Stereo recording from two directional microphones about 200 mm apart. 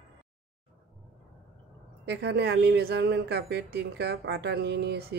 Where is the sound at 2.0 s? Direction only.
55° right (ahead or behind).